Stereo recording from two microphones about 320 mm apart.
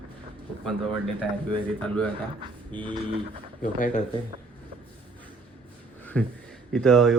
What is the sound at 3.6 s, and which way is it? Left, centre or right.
Speech, left.